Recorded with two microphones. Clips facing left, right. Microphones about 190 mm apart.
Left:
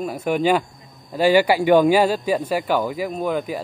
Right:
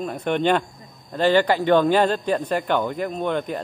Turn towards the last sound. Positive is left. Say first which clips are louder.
# left 1 dB
turn(degrees=5)  # may be behind; listen again after turning